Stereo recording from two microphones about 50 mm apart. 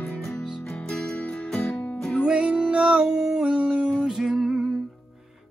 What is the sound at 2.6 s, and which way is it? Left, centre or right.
Music, centre.